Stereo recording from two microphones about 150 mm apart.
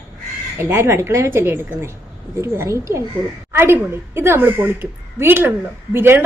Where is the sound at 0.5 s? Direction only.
15° right (ahead or behind).